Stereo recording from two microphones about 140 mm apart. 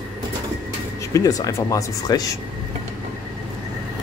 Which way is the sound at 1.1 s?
25° left (ahead or behind).